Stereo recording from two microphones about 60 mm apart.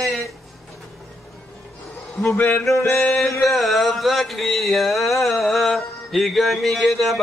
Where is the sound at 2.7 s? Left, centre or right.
Left.